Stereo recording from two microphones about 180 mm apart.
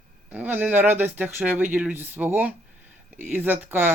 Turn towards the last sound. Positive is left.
turn(degrees=-10)  # may be behind; listen again after turning